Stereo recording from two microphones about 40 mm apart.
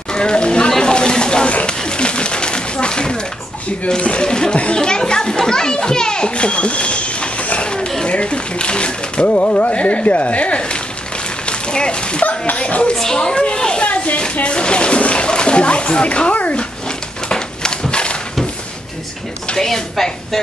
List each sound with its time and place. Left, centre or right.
0.1 s a sound: left
4.0 s speech: left
4.3 s a child's voice: left
11.4 s a sound: left
12.3 s speech: left
12.9 s a child's voice: centre
13.8 s splash: left
17.3 s a sound: centre
19.5 s a woman's voice: centre